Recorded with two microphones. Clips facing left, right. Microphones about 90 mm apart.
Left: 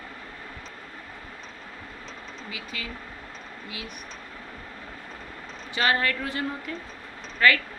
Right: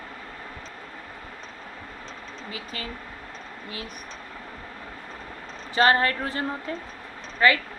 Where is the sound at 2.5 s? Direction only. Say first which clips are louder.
Right 2 dB; 40° right (ahead or behind).